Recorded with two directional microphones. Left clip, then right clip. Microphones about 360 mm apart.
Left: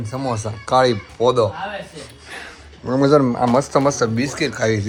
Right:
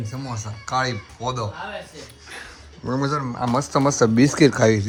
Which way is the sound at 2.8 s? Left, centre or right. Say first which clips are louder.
Left 10 dB; centre.